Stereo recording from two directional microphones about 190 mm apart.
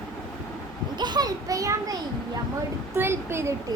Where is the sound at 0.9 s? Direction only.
20° right (ahead or behind).